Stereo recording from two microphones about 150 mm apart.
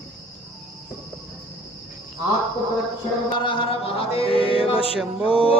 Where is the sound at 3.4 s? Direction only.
35° left (ahead or behind).